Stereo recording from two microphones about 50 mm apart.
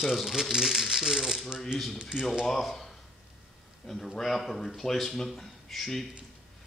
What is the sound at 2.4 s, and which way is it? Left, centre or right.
A man's voice, centre.